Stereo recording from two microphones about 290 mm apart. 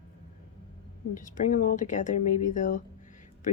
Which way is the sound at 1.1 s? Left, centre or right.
Left.